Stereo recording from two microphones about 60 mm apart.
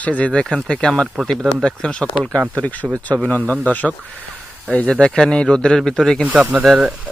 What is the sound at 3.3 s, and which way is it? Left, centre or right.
Speech, left.